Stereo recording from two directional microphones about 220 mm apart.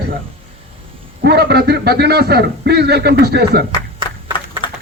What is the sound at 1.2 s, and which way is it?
A man's voice, 50° right (ahead or behind).